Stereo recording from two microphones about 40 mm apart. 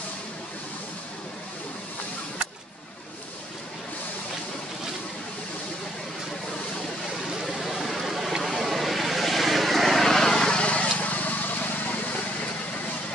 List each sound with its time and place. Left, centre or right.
7.4 s vehicle: centre
10.6 s vehicle: left